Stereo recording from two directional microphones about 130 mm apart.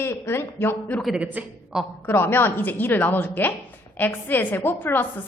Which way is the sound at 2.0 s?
15° left (ahead or behind).